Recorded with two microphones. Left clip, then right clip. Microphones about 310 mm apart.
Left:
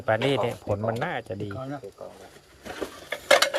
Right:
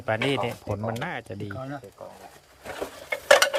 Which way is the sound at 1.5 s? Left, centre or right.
Right.